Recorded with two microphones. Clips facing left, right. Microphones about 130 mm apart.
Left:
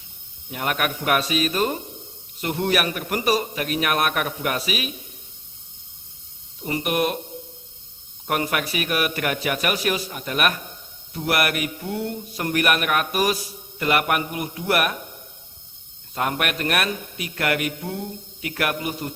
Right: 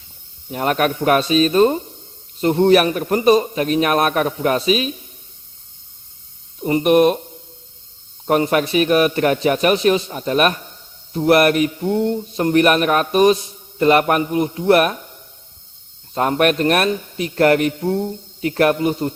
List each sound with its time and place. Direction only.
0.5 s a man's voice: 35° right (ahead or behind)
6.6 s a man's voice: 30° right (ahead or behind)
8.3 s speech: 30° right (ahead or behind)
16.1 s a man's voice: 35° right (ahead or behind)